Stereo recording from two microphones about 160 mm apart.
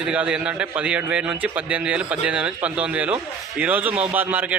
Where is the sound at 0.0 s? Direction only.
5° right (ahead or behind).